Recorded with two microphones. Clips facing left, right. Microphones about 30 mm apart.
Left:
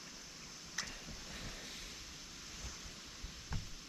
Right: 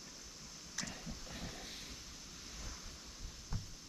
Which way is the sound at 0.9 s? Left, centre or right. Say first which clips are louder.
Right 1 dB; centre.